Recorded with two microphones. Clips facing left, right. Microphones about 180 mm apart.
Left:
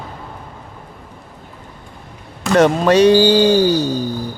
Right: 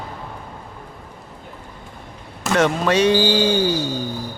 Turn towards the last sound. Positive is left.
turn(degrees=35)  # may be behind; listen again after turning